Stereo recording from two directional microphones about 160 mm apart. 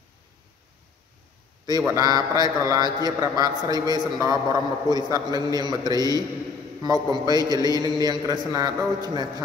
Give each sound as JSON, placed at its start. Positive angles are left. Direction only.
{"t": 1.7, "sound": "a man's voice", "side_deg": -25}